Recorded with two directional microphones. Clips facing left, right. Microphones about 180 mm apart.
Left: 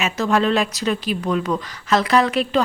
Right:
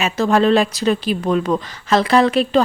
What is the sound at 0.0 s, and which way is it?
Speech, 35° right (ahead or behind).